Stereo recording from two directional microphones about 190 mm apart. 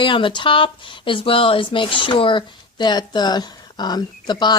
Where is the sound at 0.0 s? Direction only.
25° left (ahead or behind).